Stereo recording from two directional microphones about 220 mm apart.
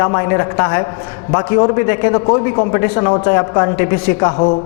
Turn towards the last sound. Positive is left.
turn(degrees=25)  # may be behind; listen again after turning